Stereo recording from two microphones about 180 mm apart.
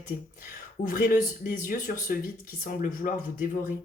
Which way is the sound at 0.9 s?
50° left (ahead or behind).